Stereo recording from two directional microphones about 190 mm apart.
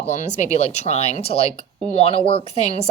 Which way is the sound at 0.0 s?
40° left (ahead or behind).